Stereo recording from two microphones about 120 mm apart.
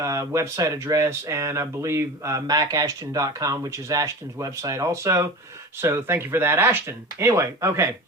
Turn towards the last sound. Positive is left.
turn(degrees=-25)  # may be behind; listen again after turning